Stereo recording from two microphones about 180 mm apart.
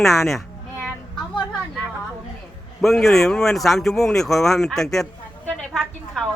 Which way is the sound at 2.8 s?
Centre (ahead or behind).